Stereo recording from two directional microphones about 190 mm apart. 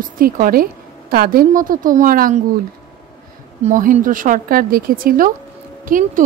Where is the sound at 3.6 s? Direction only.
45° right (ahead or behind).